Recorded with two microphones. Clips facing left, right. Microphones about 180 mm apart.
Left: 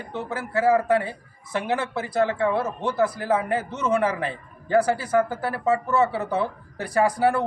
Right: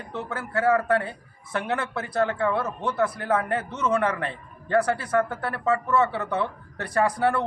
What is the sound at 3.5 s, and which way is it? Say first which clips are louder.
Speech: left 1 dB; 30° left (ahead or behind).